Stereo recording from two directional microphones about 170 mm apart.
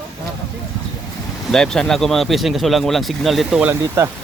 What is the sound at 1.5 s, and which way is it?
Speech, 5° left (ahead or behind).